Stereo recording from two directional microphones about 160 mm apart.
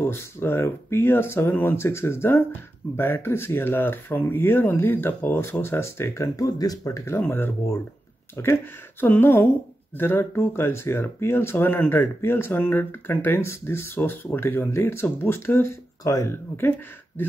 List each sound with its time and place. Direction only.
0.0 s speech: 15° left (ahead or behind)